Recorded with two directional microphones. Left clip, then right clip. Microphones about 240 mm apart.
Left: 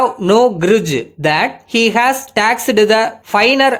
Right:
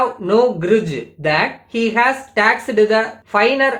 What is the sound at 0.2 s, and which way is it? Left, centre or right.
Speech, left.